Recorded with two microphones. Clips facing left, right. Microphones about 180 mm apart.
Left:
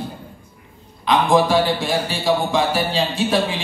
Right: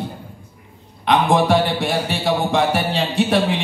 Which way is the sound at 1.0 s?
65° right (ahead or behind).